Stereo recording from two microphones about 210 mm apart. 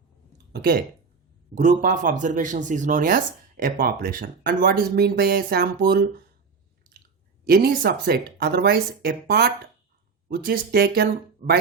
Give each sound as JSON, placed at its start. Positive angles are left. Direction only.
{"t": 0.5, "sound": "speech", "side_deg": -45}
{"t": 7.4, "sound": "speech", "side_deg": -45}